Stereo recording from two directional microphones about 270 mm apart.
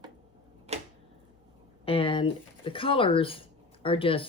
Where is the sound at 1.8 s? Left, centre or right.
Centre.